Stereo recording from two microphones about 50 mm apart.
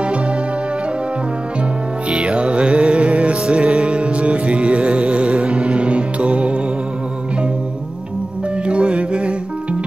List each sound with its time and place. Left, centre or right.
2.0 s music: centre
3.0 s music: right
5.3 s music: centre
8.6 s music: centre